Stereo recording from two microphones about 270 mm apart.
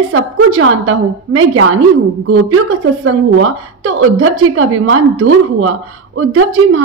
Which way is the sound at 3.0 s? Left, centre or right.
Right.